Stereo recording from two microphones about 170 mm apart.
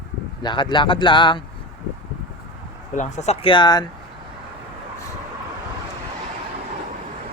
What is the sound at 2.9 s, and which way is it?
Speech, 45° left (ahead or behind).